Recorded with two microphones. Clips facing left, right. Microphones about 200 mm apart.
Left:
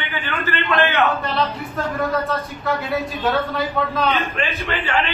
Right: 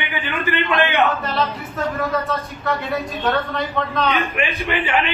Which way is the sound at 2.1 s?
Centre (ahead or behind).